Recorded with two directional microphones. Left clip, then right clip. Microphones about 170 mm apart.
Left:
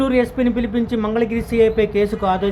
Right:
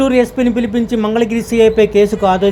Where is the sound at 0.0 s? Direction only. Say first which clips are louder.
Right 5 dB; 15° right (ahead or behind).